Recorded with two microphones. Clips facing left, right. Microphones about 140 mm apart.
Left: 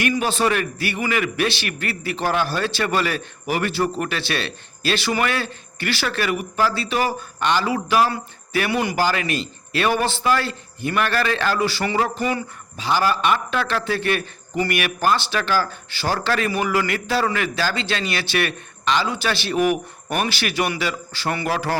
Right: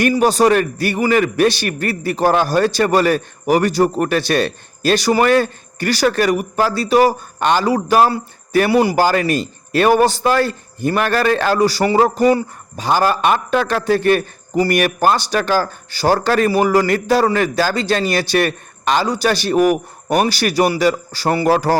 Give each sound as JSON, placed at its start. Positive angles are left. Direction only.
{"t": 0.0, "sound": "a man's voice", "side_deg": -40}